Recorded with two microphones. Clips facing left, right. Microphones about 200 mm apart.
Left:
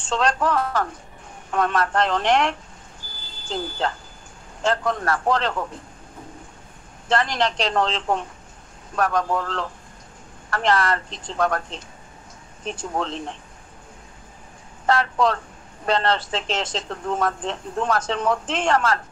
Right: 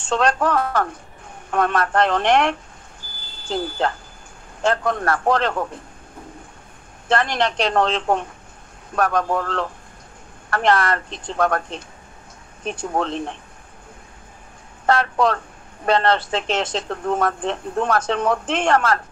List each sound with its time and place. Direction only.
0.1 s speech: 60° right (ahead or behind)
7.1 s speech: 60° right (ahead or behind)
14.9 s speech: 60° right (ahead or behind)